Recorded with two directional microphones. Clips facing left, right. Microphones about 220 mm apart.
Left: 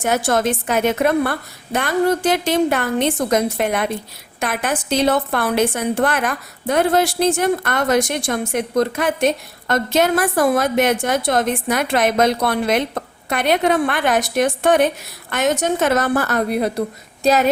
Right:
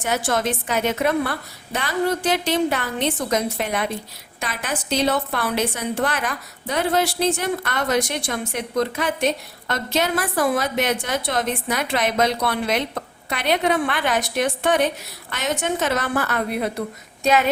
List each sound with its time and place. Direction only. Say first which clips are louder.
0.0 s a woman's voice: left 4 dB; 50° left (ahead or behind)